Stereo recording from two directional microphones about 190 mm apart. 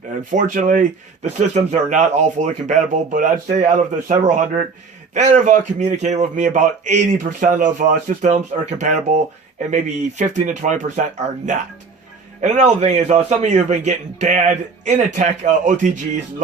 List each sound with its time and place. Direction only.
0.3 s speech: 40° right (ahead or behind)
9.6 s speech: 40° right (ahead or behind)
12.4 s speech: 40° right (ahead or behind)